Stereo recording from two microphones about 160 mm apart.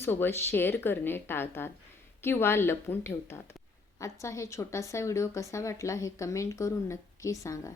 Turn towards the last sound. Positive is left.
turn(degrees=20)  # may be behind; listen again after turning